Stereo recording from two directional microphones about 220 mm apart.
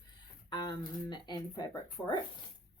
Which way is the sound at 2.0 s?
5° left (ahead or behind).